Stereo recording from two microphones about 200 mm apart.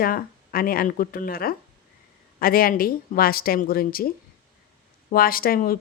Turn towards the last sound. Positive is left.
turn(degrees=45)  # may be behind; listen again after turning